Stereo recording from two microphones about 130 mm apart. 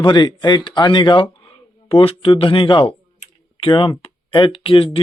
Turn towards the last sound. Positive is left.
turn(degrees=45)  # may be behind; listen again after turning